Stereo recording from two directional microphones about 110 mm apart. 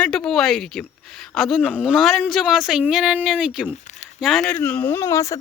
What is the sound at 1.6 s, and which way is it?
Speech, 10° right (ahead or behind).